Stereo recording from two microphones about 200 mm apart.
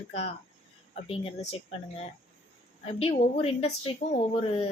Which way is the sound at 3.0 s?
30° left (ahead or behind).